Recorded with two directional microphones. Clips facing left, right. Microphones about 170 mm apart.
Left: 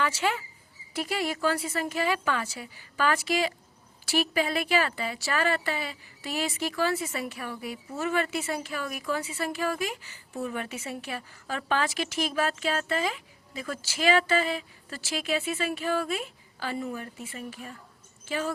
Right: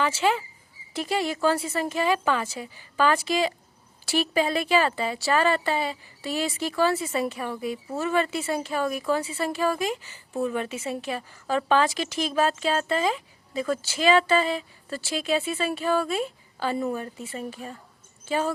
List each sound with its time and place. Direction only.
1.3 s a woman's voice: 25° right (ahead or behind)